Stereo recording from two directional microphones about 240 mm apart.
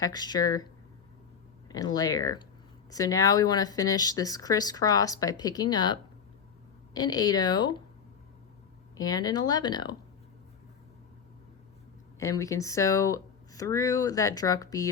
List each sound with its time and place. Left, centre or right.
0.0 s speech: centre
9.0 s speech: centre
12.2 s speech: centre